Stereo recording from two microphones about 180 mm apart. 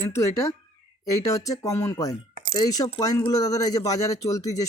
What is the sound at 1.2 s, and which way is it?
Speech, 20° left (ahead or behind).